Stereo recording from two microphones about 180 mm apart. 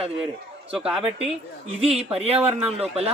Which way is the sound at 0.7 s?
5° right (ahead or behind).